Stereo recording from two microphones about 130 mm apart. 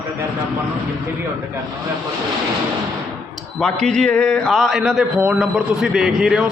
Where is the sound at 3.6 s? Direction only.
5° left (ahead or behind).